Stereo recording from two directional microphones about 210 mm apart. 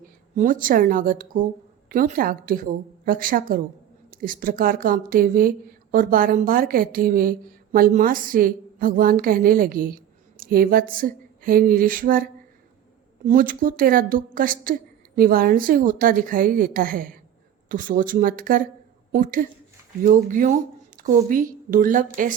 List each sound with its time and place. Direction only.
0.3 s a woman's voice: 40° right (ahead or behind)